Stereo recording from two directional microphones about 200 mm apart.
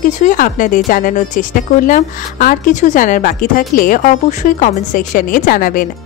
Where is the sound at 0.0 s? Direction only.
40° left (ahead or behind).